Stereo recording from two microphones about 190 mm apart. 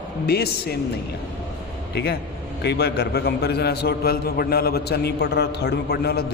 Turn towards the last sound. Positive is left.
turn(degrees=55)  # may be behind; listen again after turning